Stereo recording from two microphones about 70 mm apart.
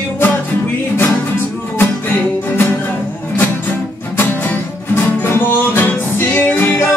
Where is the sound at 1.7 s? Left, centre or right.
Left.